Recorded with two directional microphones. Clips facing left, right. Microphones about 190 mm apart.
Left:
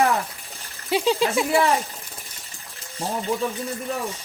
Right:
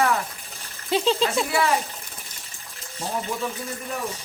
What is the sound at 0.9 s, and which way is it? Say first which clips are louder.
Speech: left 1 dB; 10° left (ahead or behind).